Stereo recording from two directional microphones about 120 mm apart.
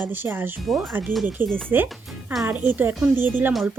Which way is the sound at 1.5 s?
15° right (ahead or behind).